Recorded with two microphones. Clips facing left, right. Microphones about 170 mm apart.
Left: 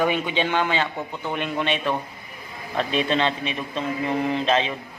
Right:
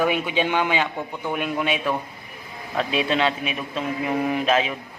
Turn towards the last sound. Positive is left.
turn(degrees=-5)  # may be behind; listen again after turning